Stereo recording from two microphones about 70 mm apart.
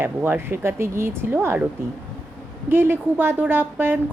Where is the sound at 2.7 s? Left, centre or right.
Right.